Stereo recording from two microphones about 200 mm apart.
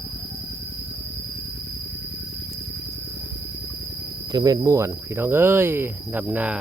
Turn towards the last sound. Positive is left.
turn(degrees=-5)  # may be behind; listen again after turning